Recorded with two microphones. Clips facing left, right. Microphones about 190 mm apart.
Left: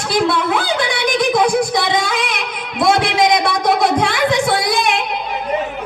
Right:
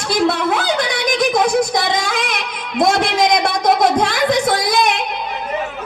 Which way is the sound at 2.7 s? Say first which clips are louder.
Even; 45° right (ahead or behind).